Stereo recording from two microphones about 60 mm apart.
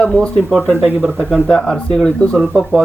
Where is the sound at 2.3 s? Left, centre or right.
Centre.